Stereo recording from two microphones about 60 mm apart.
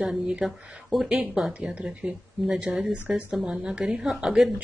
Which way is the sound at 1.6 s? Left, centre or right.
Centre.